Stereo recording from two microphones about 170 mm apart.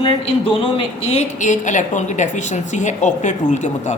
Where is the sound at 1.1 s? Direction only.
45° left (ahead or behind).